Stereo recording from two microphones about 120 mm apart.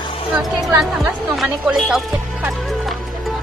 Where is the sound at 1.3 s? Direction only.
Centre (ahead or behind).